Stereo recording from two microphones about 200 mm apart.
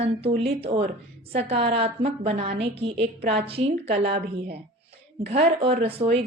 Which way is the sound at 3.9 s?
50° right (ahead or behind).